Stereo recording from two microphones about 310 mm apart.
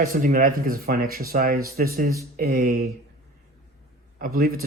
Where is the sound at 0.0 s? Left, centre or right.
Right.